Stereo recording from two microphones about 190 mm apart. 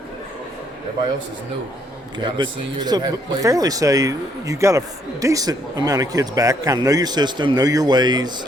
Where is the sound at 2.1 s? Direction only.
25° right (ahead or behind).